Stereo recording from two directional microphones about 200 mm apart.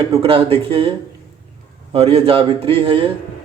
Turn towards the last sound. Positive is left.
turn(degrees=-25)  # may be behind; listen again after turning